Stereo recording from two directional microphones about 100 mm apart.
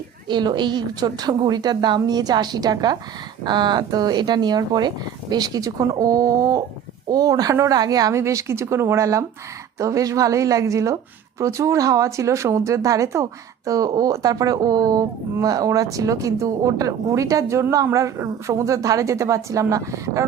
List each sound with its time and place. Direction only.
0.3 s a woman's voice: 50° right (ahead or behind); by 20.2 s 35° right (ahead or behind)